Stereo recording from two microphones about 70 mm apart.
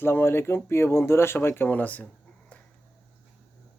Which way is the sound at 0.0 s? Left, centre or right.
Left.